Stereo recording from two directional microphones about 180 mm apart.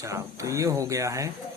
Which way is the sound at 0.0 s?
15° right (ahead or behind).